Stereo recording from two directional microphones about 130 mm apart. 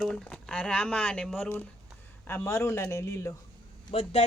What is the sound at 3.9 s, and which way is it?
Speech, 50° left (ahead or behind).